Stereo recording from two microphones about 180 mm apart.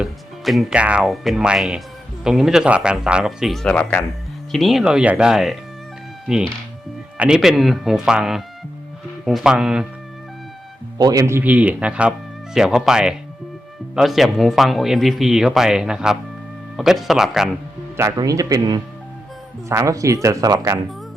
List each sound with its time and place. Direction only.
0.0 s speech: centre (ahead or behind)
7.2 s speech: 5° right (ahead or behind)
10.9 s speech: 20° right (ahead or behind); by 17.5 s centre (ahead or behind)
17.9 s speech: 15° right (ahead or behind)